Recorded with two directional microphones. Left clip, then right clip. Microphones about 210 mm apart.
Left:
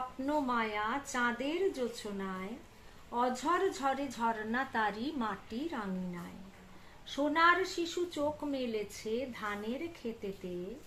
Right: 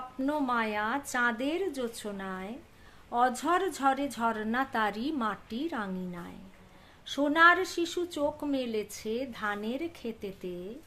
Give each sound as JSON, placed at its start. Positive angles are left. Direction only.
{"t": 0.3, "sound": "a woman's voice", "side_deg": -55}